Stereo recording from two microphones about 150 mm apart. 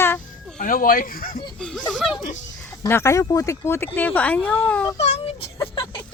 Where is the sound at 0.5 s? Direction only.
65° left (ahead or behind).